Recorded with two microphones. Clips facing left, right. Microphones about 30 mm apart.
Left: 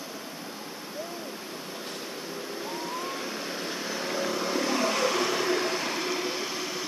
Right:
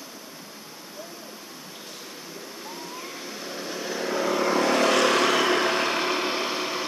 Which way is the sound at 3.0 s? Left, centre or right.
Centre.